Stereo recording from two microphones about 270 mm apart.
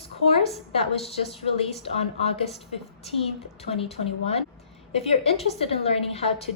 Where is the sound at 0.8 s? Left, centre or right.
Left.